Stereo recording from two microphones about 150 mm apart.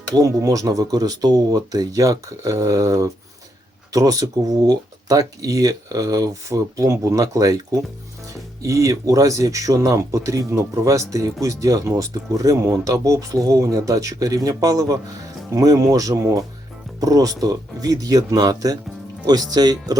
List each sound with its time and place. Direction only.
0.1 s speech: 25° right (ahead or behind)